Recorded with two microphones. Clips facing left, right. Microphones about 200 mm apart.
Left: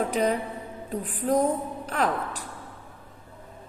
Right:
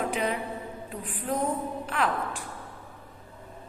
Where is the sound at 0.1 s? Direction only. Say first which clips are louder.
Left 4 dB; 40° left (ahead or behind).